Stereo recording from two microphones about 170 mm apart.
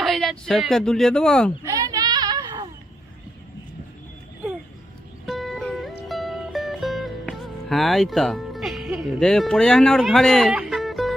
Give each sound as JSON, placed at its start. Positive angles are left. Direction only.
{"t": 0.0, "sound": "speech", "side_deg": 0}
{"t": 1.6, "sound": "a sound", "side_deg": -20}
{"t": 5.2, "sound": "music", "side_deg": 0}